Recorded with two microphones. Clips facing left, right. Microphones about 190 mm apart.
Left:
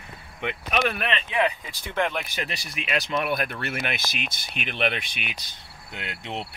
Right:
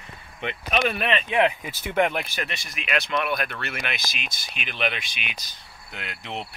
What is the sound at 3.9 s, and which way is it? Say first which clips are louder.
Speech: left 2 dB; 55° left (ahead or behind).